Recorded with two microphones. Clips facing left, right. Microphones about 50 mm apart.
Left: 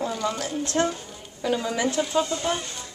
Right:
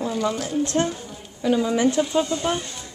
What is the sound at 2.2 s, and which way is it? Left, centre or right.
Speech, right.